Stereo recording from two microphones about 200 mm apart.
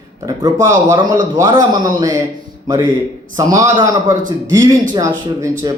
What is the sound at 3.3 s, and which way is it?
A man's voice, 15° right (ahead or behind).